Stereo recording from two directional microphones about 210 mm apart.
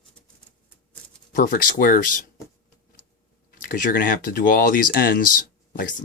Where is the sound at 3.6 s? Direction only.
40° left (ahead or behind).